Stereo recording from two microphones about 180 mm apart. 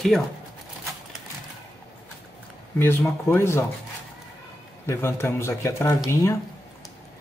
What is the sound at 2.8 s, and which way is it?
Speech, 15° left (ahead or behind).